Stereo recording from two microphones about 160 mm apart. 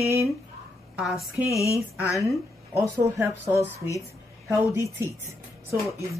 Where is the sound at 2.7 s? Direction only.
15° right (ahead or behind).